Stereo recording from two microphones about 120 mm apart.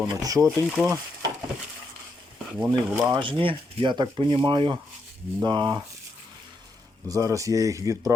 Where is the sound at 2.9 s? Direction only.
10° right (ahead or behind).